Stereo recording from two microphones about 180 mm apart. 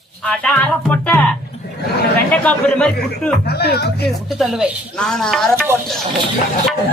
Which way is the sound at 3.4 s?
65° left (ahead or behind).